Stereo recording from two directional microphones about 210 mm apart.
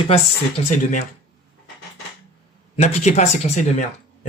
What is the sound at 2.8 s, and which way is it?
Speech, 30° left (ahead or behind).